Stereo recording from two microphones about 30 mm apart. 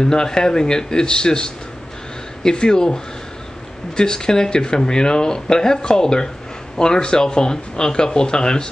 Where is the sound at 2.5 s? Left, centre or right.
Left.